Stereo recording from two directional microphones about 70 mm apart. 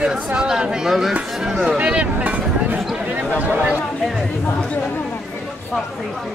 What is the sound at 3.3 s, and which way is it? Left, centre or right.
Speech, right.